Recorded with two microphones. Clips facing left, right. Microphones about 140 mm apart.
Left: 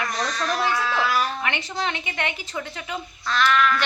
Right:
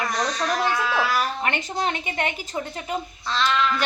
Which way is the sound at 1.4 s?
45° right (ahead or behind).